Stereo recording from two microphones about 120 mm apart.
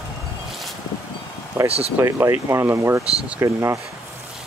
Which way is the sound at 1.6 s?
55° right (ahead or behind).